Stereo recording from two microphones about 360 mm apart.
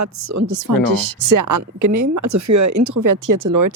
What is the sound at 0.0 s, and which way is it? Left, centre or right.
A woman's voice, right.